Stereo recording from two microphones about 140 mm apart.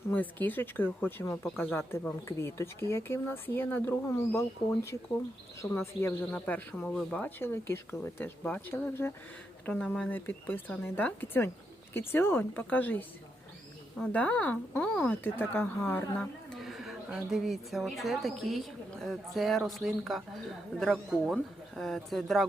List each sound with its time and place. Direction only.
0.1 s speech: 10° left (ahead or behind)
9.6 s speech: 5° left (ahead or behind)